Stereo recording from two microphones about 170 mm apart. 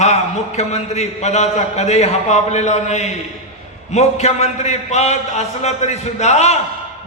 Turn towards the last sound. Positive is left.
turn(degrees=40)  # may be behind; listen again after turning